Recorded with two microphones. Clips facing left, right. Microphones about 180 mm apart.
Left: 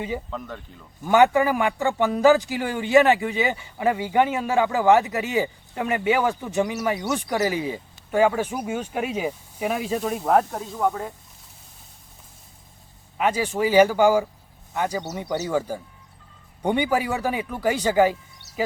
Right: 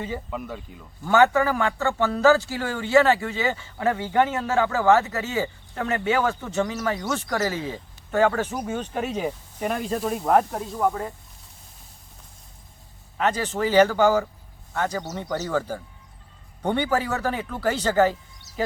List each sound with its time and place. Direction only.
0.3 s speech: 10° right (ahead or behind)
1.0 s speech: 15° left (ahead or behind); by 11.1 s centre (ahead or behind)
13.1 s speech: 10° left (ahead or behind)